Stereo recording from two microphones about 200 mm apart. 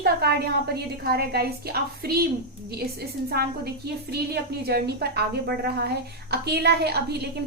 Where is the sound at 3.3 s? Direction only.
50° right (ahead or behind).